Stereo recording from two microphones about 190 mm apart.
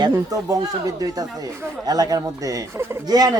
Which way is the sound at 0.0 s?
20° right (ahead or behind).